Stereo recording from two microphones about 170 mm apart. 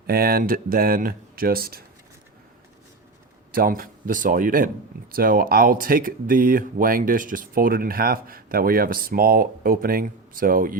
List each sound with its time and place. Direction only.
0.1 s speech: 60° right (ahead or behind)
3.5 s speech: 60° right (ahead or behind)